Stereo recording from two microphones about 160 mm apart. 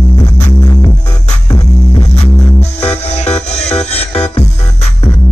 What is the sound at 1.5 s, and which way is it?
Music, 40° left (ahead or behind).